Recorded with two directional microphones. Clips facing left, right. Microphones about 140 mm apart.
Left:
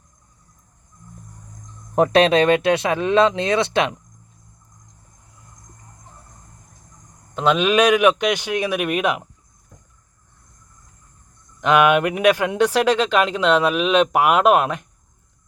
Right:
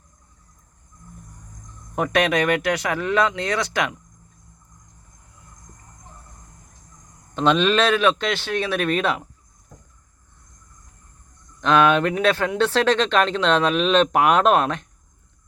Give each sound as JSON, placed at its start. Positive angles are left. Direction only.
{"t": 2.0, "sound": "speech", "side_deg": 30}
{"t": 7.3, "sound": "speech", "side_deg": 5}
{"t": 11.6, "sound": "speech", "side_deg": 15}